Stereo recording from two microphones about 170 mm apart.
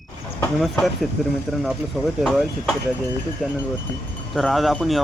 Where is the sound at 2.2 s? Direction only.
Centre (ahead or behind).